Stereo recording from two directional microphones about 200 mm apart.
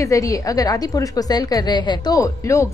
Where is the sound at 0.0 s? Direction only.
15° left (ahead or behind).